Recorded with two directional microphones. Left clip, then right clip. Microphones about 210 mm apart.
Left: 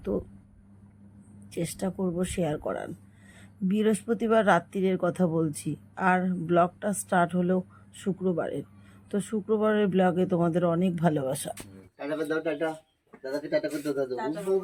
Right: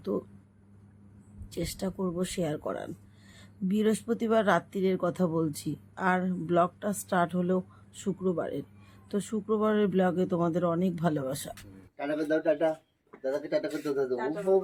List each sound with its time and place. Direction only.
0.0 s speech: centre (ahead or behind)
1.5 s speech: 5° left (ahead or behind)
11.9 s a man's voice: 15° right (ahead or behind)
13.1 s speech: centre (ahead or behind)